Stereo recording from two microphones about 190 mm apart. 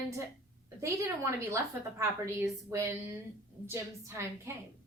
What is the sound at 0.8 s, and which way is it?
A woman's voice, 15° right (ahead or behind).